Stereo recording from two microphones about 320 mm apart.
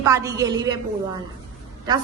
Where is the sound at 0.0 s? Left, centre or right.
Centre.